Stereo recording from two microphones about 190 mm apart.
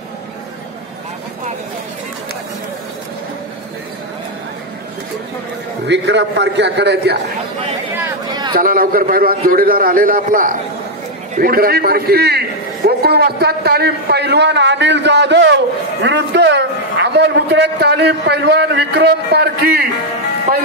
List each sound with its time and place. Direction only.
5.9 s a man's voice: 65° right (ahead or behind)
8.3 s a sound: 20° right (ahead or behind)
8.5 s a man's voice: 50° right (ahead or behind)